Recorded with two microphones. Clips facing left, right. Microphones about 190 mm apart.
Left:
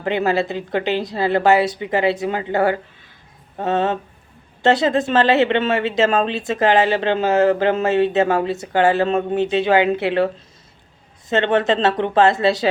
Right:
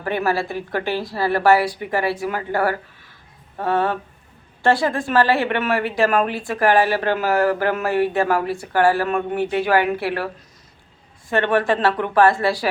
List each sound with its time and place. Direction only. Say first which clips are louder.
0.0 s a woman's voice: left 3 dB; 20° left (ahead or behind)
11.3 s a woman's voice: left 2 dB; 20° left (ahead or behind)